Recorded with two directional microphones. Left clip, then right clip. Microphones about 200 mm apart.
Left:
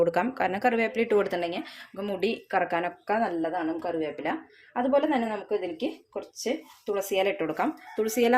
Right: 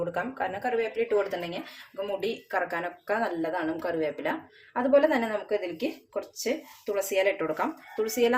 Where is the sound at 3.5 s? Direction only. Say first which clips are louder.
Even; 5° left (ahead or behind).